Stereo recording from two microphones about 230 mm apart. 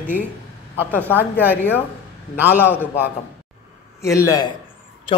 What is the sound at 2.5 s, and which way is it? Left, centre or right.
Speech, centre.